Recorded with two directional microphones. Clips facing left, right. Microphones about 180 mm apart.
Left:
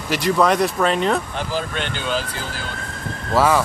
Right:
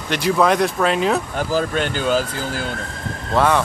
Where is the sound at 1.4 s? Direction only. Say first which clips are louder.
Right 5 dB; 45° right (ahead or behind).